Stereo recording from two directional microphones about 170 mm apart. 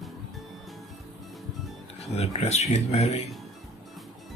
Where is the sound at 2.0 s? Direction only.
40° left (ahead or behind).